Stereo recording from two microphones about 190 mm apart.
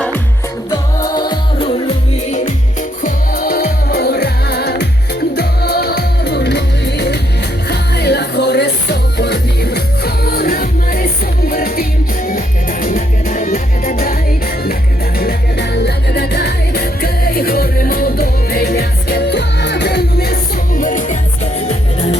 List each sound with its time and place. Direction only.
0.7 s music: 20° left (ahead or behind)
3.0 s music: 50° left (ahead or behind)
15.2 s music: 55° left (ahead or behind)
20.7 s music: 45° left (ahead or behind)